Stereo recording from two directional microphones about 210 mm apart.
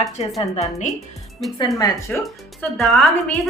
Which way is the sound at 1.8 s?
15° left (ahead or behind).